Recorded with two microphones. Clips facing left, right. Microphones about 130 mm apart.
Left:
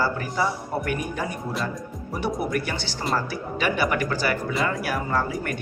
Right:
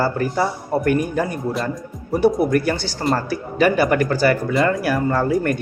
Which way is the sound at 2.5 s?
45° right (ahead or behind).